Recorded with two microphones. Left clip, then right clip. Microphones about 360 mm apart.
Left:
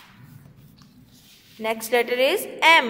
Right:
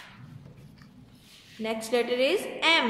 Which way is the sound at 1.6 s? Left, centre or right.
Centre.